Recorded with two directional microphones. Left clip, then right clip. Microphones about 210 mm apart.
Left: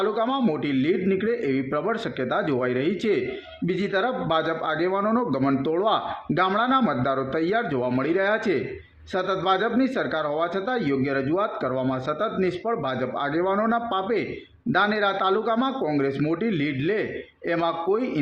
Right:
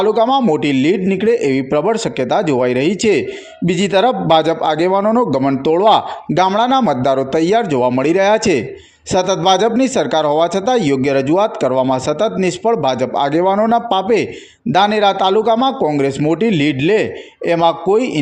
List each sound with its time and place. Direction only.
0.0 s a man's voice: 30° right (ahead or behind)